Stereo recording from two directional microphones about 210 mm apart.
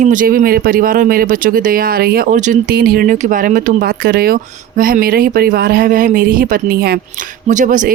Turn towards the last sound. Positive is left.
turn(degrees=-40)  # may be behind; listen again after turning